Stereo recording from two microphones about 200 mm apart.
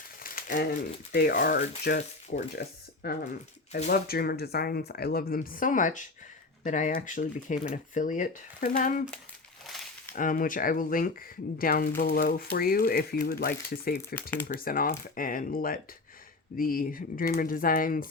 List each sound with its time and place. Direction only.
0.2 s crumpling: 45° left (ahead or behind)
1.1 s speech: 50° left (ahead or behind)
10.2 s speech: 40° left (ahead or behind)